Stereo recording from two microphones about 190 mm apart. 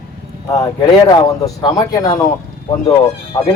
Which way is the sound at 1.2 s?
20° left (ahead or behind).